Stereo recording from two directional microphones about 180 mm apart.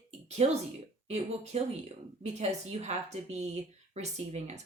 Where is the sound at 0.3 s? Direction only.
40° right (ahead or behind).